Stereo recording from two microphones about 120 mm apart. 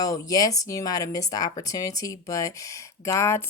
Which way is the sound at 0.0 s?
30° left (ahead or behind).